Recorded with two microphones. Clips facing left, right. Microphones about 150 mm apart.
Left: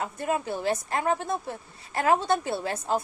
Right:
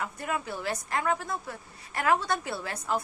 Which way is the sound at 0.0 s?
30° left (ahead or behind).